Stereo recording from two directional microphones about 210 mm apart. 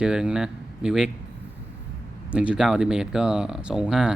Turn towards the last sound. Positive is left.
turn(degrees=-5)  # may be behind; listen again after turning